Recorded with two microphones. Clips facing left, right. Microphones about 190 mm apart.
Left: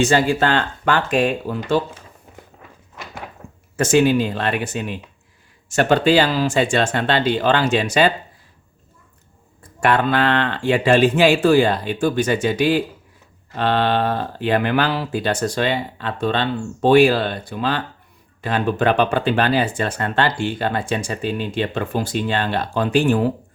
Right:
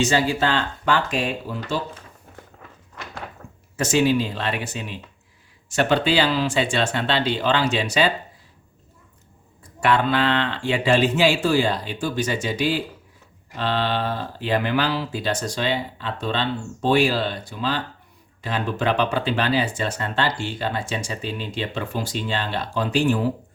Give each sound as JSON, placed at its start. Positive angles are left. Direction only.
{"t": 0.0, "sound": "speech", "side_deg": 55}
{"t": 2.9, "sound": "thunk", "side_deg": 0}
{"t": 3.8, "sound": "speech", "side_deg": 50}
{"t": 9.8, "sound": "speech", "side_deg": 50}